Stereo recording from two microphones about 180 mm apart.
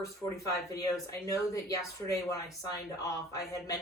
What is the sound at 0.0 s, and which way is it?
A man's voice, 20° left (ahead or behind).